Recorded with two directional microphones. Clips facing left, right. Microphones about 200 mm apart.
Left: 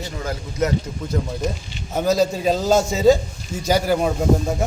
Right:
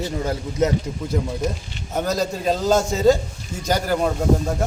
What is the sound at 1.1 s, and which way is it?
Speech, 10° right (ahead or behind).